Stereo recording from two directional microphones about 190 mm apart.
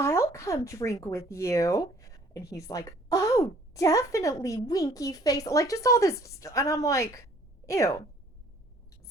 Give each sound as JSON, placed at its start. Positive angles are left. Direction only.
{"t": 0.0, "sound": "speech", "side_deg": 15}